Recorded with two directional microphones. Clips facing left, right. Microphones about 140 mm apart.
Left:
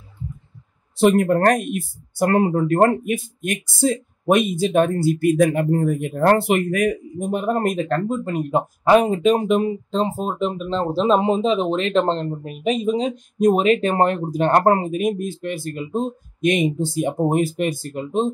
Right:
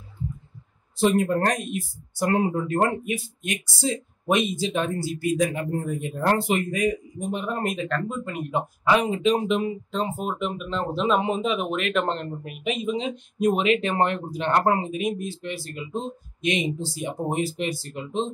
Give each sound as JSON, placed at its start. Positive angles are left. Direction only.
{"t": 0.9, "sound": "speech", "side_deg": 65}
{"t": 9.7, "sound": "speech", "side_deg": 30}